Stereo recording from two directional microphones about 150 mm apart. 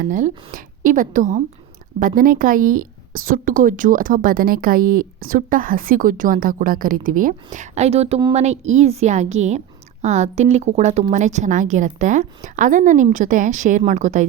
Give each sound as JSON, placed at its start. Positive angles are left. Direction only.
{"t": 0.0, "sound": "a woman's voice", "side_deg": -55}